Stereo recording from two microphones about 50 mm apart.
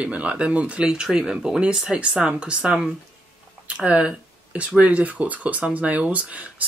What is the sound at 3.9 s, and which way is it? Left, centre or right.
Speech, right.